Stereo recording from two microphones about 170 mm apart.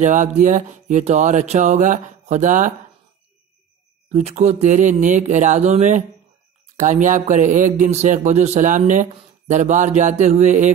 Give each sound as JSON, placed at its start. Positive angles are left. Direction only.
{"t": 0.0, "sound": "speech", "side_deg": -45}
{"t": 4.1, "sound": "speech", "side_deg": -40}